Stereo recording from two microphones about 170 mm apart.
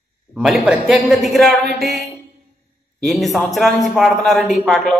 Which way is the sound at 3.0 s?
Centre (ahead or behind).